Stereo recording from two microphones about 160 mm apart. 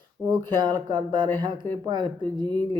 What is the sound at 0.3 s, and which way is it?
Speech, 25° right (ahead or behind).